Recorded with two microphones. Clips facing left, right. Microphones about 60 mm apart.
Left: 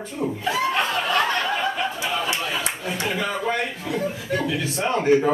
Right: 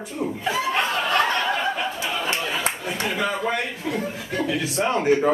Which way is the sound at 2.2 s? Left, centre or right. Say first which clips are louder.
Right 1 dB; right.